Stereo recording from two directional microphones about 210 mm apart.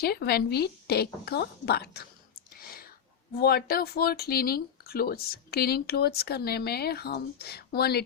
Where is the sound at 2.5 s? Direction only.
45° left (ahead or behind).